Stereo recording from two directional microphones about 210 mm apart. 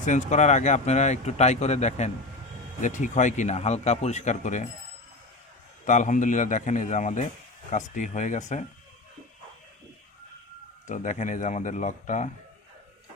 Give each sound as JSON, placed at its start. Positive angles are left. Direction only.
{"t": 0.0, "sound": "speech", "side_deg": 35}
{"t": 5.8, "sound": "speech", "side_deg": 35}
{"t": 10.8, "sound": "speech", "side_deg": 35}